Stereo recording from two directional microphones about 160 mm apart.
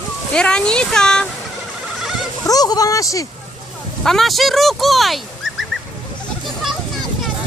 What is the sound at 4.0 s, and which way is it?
Speech, centre (ahead or behind).